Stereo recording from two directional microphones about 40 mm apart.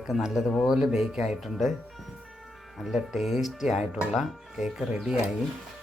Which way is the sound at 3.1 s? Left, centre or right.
Centre.